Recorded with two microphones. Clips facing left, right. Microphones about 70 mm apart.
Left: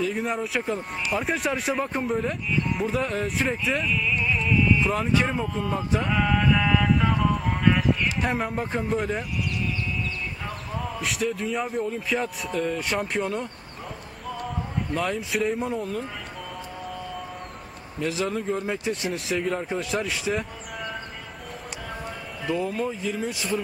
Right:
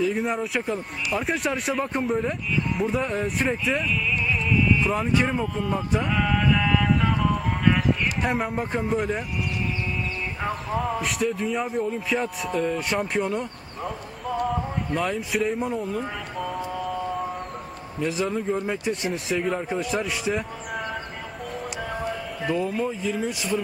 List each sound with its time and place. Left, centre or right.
0.0 s speech: centre
11.0 s speech: centre
15.0 s speech: centre
15.6 s speech: centre
18.2 s speech: centre
23.2 s speech: centre